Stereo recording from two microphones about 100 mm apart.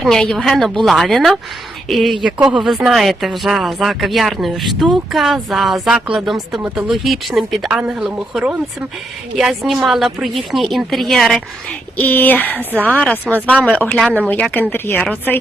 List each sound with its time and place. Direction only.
0.0 s speech: 5° left (ahead or behind)
11.9 s speech: 20° left (ahead or behind)
12.5 s a woman's voice: 20° right (ahead or behind)
13.3 s speech: centre (ahead or behind)
13.7 s speech: 10° left (ahead or behind)